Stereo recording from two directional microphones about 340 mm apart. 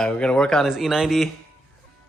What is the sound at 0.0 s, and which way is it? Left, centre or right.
Speech, centre.